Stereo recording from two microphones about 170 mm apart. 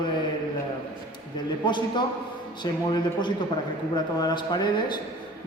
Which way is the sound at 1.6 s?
25° left (ahead or behind).